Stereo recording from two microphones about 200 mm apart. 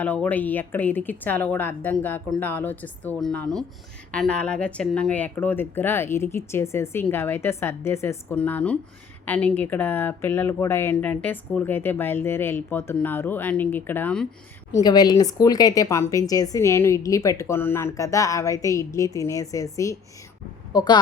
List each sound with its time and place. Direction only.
0.0 s speech: 10° left (ahead or behind)
14.7 s a woman's voice: 20° left (ahead or behind)